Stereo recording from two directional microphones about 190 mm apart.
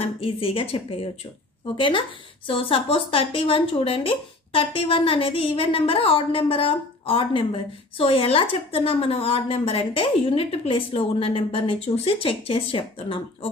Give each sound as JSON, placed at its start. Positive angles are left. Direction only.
{"t": 0.0, "sound": "a woman's voice", "side_deg": 30}